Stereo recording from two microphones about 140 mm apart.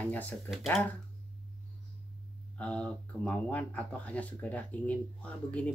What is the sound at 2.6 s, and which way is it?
Speech, 10° left (ahead or behind).